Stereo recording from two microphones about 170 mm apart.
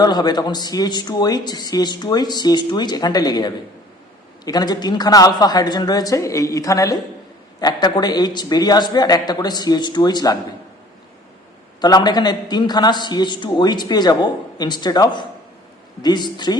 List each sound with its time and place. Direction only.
0.0 s a man's voice: 25° left (ahead or behind)
11.8 s a man's voice: 25° left (ahead or behind)